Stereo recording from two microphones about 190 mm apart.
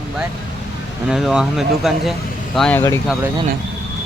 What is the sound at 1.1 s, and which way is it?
Speech, 5° right (ahead or behind).